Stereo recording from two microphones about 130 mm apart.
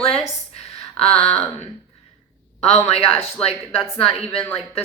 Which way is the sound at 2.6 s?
55° left (ahead or behind).